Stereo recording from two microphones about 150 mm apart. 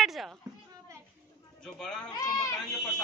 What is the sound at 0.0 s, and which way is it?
Speech, centre (ahead or behind).